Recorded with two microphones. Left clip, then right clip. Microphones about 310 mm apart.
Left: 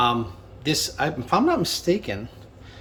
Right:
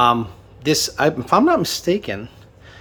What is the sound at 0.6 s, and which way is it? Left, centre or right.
Speech, centre.